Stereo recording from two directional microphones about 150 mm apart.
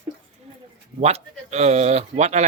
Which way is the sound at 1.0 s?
45° right (ahead or behind).